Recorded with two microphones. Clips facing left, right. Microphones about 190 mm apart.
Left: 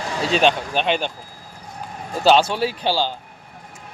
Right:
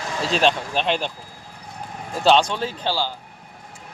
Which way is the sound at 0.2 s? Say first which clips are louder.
Left 2 dB; centre (ahead or behind).